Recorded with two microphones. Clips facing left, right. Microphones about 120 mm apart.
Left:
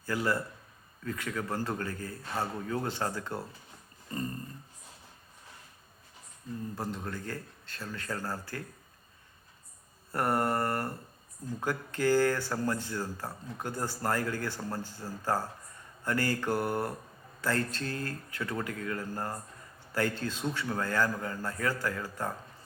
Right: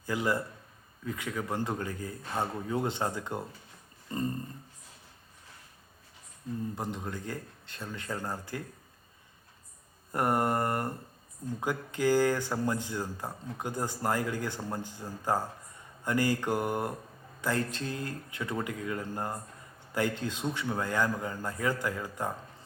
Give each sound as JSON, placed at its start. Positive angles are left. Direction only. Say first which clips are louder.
{"t": 0.0, "sound": "a man's voice", "louder": "right 1 dB", "side_deg": -15}
{"t": 4.1, "sound": "a sound", "louder": "right 3 dB", "side_deg": -25}
{"t": 6.7, "sound": "speech", "louder": "even", "side_deg": -20}
{"t": 10.1, "sound": "speech", "louder": "right 1 dB", "side_deg": -15}